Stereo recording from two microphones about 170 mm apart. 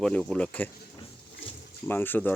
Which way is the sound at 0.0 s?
Centre (ahead or behind).